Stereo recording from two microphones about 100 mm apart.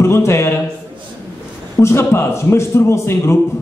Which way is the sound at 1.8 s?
25° left (ahead or behind).